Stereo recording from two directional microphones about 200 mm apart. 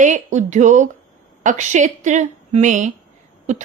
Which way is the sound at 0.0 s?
40° right (ahead or behind).